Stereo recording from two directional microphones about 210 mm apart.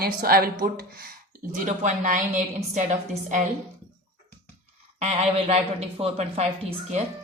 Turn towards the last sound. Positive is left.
turn(degrees=-25)  # may be behind; listen again after turning